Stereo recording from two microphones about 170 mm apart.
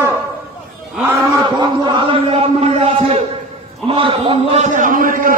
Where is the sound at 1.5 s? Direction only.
25° right (ahead or behind).